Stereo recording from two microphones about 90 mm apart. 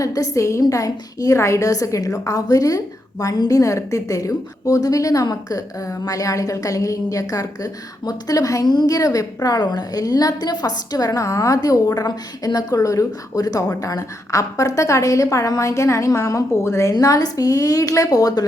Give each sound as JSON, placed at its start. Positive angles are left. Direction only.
{"t": 0.0, "sound": "a woman's voice", "side_deg": 40}
{"t": 16.9, "sound": "a woman's voice", "side_deg": 40}